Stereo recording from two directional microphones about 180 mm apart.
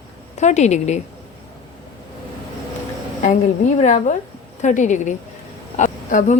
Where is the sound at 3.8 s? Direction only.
45° left (ahead or behind).